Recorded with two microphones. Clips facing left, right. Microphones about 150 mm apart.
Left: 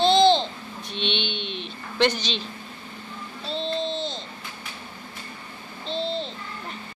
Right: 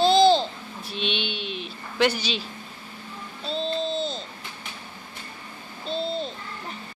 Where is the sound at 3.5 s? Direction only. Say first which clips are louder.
Right 1 dB; 5° right (ahead or behind).